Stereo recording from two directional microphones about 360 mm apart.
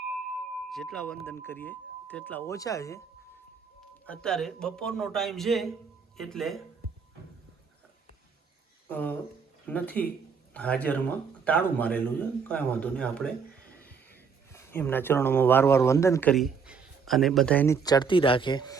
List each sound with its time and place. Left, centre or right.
0.7 s a man's voice: centre
4.0 s a man's voice: centre
8.9 s a man's voice: centre